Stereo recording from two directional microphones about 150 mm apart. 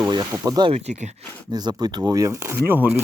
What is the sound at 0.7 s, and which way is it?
Speech, 45° right (ahead or behind).